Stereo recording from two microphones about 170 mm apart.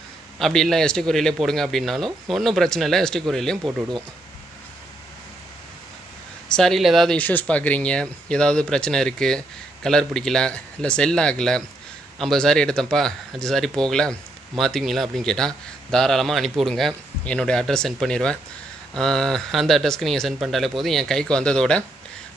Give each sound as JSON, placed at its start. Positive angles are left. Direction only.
{"t": 0.4, "sound": "speech", "side_deg": 0}
{"t": 6.5, "sound": "speech", "side_deg": 0}